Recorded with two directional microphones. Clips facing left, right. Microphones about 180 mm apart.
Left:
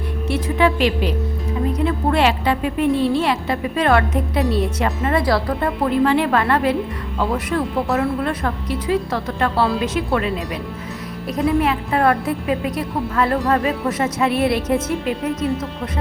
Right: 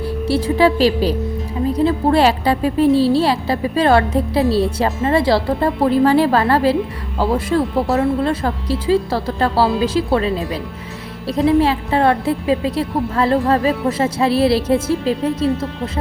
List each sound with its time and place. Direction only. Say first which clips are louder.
0.0 s a woman's voice: right 5 dB; 30° right (ahead or behind)